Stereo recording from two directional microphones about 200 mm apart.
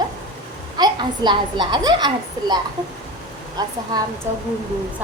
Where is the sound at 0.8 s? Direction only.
20° right (ahead or behind).